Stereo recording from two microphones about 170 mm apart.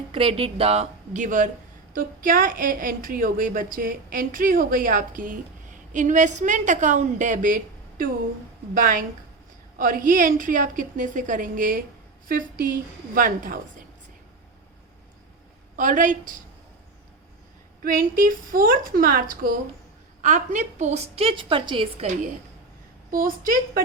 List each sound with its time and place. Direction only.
0.1 s a woman's voice: 30° right (ahead or behind); by 13.8 s 55° right (ahead or behind)
15.7 s a woman's voice: 50° right (ahead or behind)
17.8 s a woman's voice: 55° right (ahead or behind)
20.2 s a woman's voice: 45° right (ahead or behind)
23.1 s a woman's voice: 55° right (ahead or behind)